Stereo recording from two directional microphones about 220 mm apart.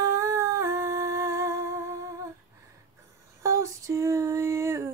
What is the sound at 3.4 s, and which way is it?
Female singing, 15° right (ahead or behind).